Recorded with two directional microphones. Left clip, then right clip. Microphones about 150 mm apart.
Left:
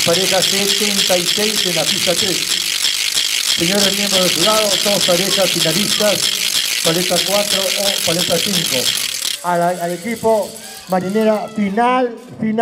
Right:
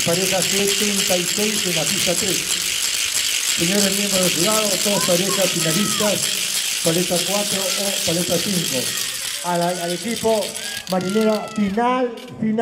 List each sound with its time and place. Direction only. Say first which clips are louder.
4.6 s speech: left 5 dB; 10° left (ahead or behind)
9.5 s speech: left 5 dB; 25° left (ahead or behind)
10.9 s speech: left 4 dB; 25° left (ahead or behind)